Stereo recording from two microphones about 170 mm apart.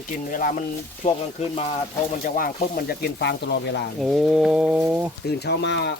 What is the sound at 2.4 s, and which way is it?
Speech, 55° left (ahead or behind).